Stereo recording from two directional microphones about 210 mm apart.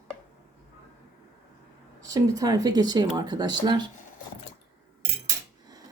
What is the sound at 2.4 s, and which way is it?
Speech, 20° right (ahead or behind).